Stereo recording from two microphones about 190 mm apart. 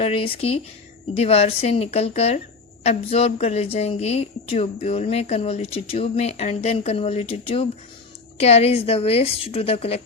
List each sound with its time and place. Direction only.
0.0 s a woman's voice: 30° left (ahead or behind)